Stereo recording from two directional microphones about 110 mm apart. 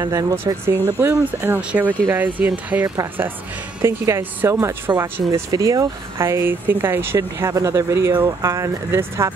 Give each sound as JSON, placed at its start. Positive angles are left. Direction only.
{"t": 0.0, "sound": "speech", "side_deg": -30}
{"t": 3.8, "sound": "speech", "side_deg": -25}
{"t": 5.5, "sound": "speech", "side_deg": -30}